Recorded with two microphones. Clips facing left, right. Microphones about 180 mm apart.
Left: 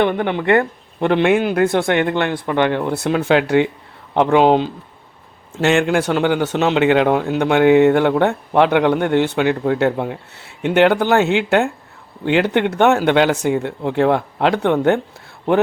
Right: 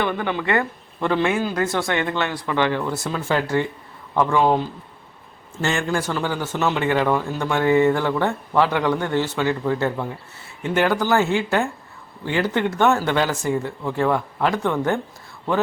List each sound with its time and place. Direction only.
1.0 s speech: 65° left (ahead or behind)
2.9 s a man's voice: 65° left (ahead or behind)